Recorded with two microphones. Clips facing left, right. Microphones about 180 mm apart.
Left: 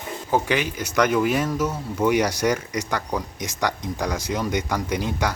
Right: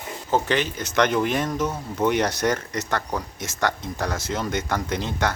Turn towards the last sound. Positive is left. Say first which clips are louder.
# left 1 dB
turn(degrees=10)  # may be behind; listen again after turning